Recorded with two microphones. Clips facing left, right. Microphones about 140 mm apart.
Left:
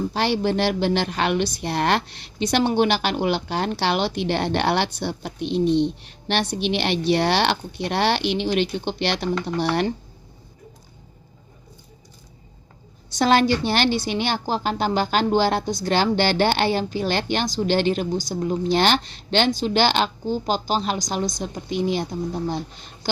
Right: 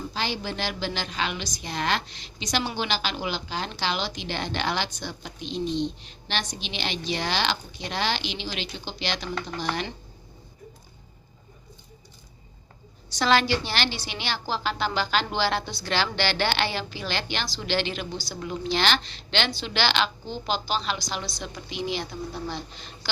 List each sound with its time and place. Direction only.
0.1 s a woman's voice: 60° left (ahead or behind)
13.1 s a woman's voice: 50° left (ahead or behind)